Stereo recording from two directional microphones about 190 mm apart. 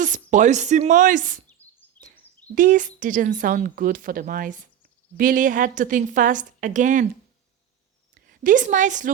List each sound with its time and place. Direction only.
0.0 s speech: 40° right (ahead or behind)
1.6 s a sound: 10° left (ahead or behind)
2.6 s speech: 45° right (ahead or behind)
8.1 s a woman's voice: 45° right (ahead or behind)